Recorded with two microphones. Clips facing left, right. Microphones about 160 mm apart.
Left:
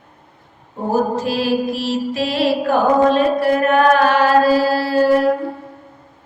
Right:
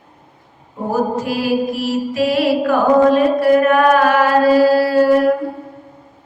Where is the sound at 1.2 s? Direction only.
30° left (ahead or behind).